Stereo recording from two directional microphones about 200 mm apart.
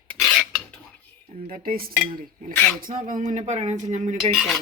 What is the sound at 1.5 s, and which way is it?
Speech, 45° right (ahead or behind).